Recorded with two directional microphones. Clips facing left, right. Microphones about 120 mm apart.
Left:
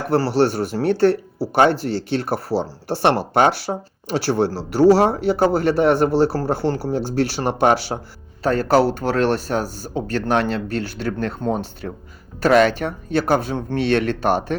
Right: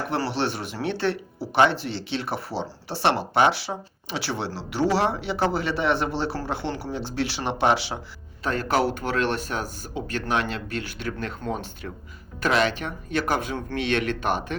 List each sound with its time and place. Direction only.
0.1 s speech: 40° left (ahead or behind)